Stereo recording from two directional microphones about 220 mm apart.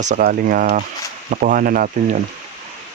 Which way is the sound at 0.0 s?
35° right (ahead or behind).